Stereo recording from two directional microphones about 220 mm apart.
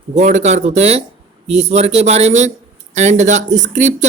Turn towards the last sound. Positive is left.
turn(degrees=-30)  # may be behind; listen again after turning